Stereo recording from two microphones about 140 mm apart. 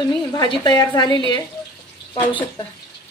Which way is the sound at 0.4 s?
30° left (ahead or behind).